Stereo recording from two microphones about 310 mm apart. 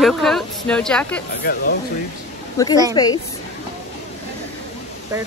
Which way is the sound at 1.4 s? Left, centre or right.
Left.